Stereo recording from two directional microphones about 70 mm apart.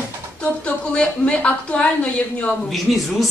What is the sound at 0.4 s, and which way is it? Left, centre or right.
Speech, centre.